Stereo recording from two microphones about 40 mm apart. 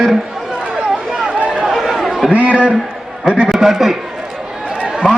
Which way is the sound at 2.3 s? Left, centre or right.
Right.